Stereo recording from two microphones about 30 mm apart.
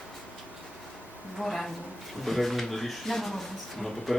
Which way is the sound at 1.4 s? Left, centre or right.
Centre.